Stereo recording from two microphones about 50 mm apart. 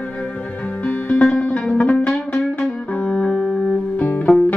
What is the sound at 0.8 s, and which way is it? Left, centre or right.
Music, left.